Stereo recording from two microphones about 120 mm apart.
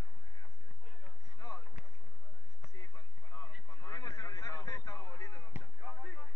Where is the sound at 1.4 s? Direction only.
30° left (ahead or behind).